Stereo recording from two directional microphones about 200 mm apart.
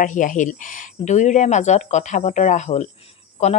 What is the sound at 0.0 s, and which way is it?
Speech, 40° left (ahead or behind).